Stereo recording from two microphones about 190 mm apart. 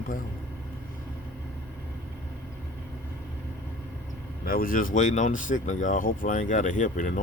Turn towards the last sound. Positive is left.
turn(degrees=40)  # may be behind; listen again after turning